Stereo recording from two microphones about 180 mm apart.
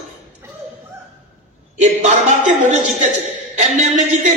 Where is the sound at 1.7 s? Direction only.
40° right (ahead or behind).